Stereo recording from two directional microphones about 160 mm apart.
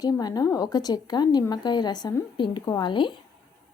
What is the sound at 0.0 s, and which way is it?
A woman's voice, 25° left (ahead or behind).